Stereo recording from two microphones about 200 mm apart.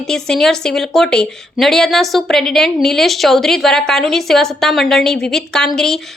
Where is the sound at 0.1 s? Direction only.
Centre (ahead or behind).